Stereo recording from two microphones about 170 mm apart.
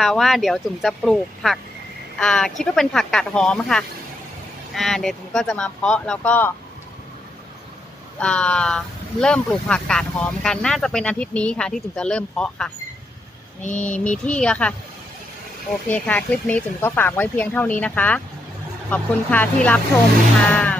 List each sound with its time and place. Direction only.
0.0 s speech: centre (ahead or behind)
8.2 s speech: 5° left (ahead or behind)
13.6 s speech: 45° left (ahead or behind)
14.2 s speech: 5° left (ahead or behind)
15.9 s speech: 10° left (ahead or behind)